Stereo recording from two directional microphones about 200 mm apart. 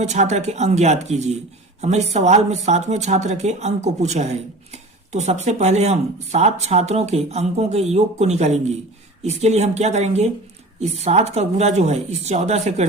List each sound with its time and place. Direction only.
0.0 s speech: 35° right (ahead or behind)